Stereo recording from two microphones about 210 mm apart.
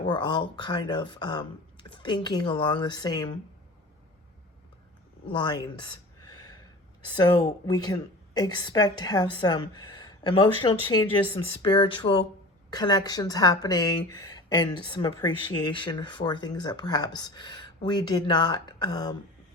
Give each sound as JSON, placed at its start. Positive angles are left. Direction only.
{"t": 0.0, "sound": "a woman's voice", "side_deg": 20}
{"t": 5.3, "sound": "a woman's voice", "side_deg": 20}